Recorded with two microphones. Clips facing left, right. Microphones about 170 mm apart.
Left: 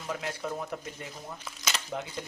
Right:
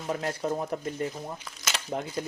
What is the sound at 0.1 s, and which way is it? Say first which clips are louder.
Speech: right 5 dB; 40° right (ahead or behind).